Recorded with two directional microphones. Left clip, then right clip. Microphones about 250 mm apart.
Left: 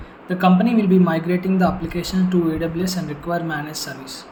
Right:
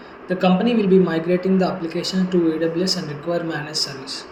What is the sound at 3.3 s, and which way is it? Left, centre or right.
Speech, left.